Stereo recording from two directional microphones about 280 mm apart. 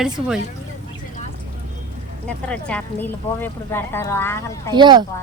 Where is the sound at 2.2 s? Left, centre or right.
Centre.